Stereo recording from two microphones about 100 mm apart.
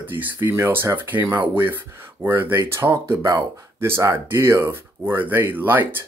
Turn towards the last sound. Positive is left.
turn(degrees=-20)  # may be behind; listen again after turning